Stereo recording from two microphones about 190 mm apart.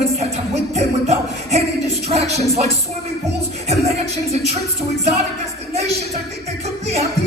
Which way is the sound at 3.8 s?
35° right (ahead or behind).